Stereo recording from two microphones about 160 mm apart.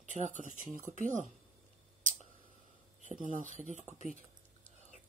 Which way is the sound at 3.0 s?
50° right (ahead or behind).